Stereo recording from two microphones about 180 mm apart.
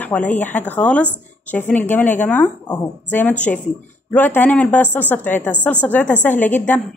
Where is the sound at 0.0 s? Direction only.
10° left (ahead or behind).